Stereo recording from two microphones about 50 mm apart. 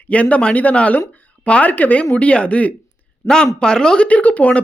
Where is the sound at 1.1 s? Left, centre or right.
Left.